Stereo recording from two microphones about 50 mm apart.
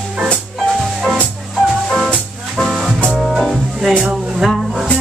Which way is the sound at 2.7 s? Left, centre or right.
Centre.